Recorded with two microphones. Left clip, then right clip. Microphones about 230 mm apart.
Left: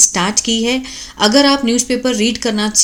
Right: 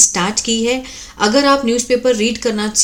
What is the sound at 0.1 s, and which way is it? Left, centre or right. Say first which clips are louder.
A woman's voice: left 1 dB; centre.